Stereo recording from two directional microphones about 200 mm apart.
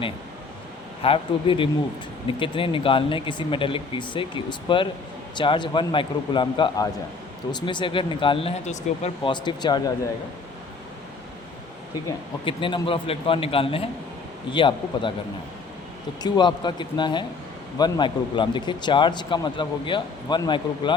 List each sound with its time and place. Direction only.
1.0 s speech: 25° left (ahead or behind)
12.5 s speech: 25° left (ahead or behind)
16.2 s speech: 20° left (ahead or behind)